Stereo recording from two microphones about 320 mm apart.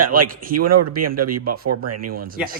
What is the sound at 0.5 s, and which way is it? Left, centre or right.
Speech, right.